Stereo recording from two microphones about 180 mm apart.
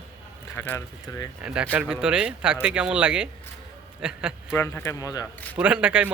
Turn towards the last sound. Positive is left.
turn(degrees=-5)  # may be behind; listen again after turning